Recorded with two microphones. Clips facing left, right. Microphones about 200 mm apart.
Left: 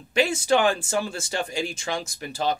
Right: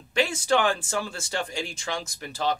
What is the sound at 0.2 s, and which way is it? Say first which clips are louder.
Speech: left 3 dB; 15° left (ahead or behind).